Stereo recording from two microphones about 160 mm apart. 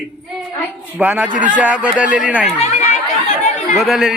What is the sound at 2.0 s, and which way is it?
Speech, 55° left (ahead or behind).